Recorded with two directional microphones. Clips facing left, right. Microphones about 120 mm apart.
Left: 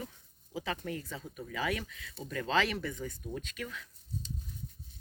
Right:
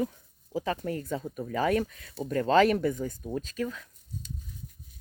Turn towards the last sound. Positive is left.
turn(degrees=-35)  # may be behind; listen again after turning